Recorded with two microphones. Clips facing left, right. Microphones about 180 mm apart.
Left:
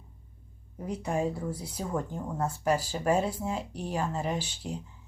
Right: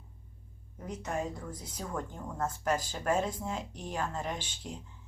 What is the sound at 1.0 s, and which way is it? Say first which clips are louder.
Speech: left 6 dB; 10° left (ahead or behind).